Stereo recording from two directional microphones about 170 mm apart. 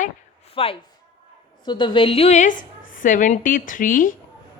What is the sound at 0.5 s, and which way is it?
A woman's voice, 35° left (ahead or behind).